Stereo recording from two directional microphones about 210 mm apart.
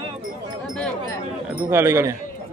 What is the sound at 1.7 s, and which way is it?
Speech, 10° right (ahead or behind).